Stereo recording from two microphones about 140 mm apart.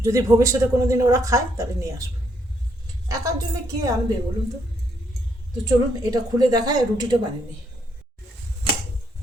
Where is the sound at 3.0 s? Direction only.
25° right (ahead or behind).